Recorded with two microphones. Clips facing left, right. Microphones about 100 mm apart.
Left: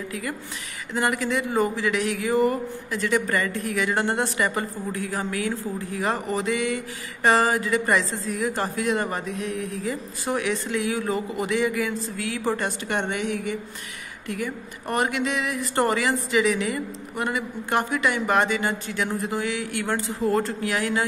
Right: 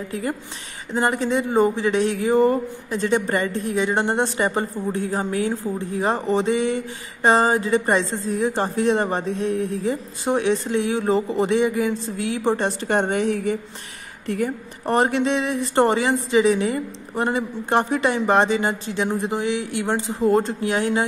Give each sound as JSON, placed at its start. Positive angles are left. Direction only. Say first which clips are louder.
{"t": 0.1, "sound": "a woman's voice", "louder": "right 4 dB", "side_deg": -30}